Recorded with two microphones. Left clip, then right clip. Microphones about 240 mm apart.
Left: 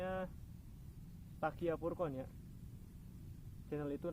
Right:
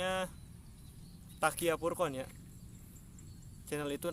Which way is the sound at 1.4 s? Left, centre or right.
Right.